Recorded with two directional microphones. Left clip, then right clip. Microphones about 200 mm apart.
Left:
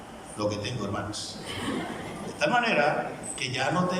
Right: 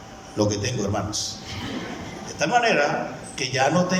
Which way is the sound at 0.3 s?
40° right (ahead or behind).